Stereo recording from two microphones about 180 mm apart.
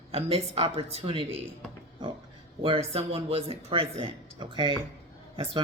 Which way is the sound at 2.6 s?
35° right (ahead or behind).